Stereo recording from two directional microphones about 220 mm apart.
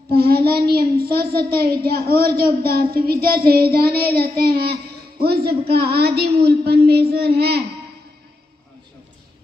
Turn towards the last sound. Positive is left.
turn(degrees=-45)  # may be behind; listen again after turning